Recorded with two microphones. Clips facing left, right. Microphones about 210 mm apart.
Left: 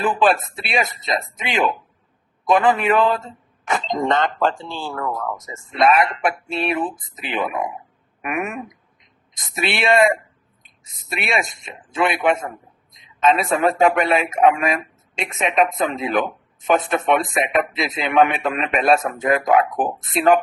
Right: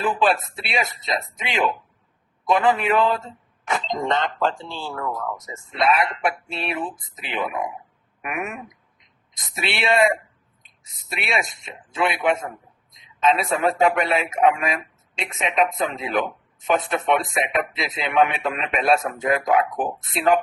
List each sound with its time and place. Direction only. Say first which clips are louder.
0.0 s speech: left 3 dB; 50° left (ahead or behind)
13.2 s speech: left 3 dB; 50° left (ahead or behind)